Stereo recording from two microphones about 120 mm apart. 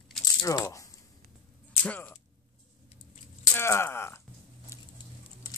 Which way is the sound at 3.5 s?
20° left (ahead or behind).